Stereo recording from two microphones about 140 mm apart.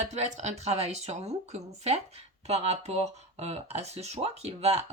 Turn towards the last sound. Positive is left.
turn(degrees=-50)  # may be behind; listen again after turning